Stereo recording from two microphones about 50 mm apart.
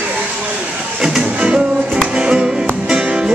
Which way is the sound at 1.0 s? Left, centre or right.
Centre.